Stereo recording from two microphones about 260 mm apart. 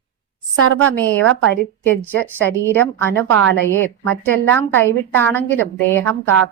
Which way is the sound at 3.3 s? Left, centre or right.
Right.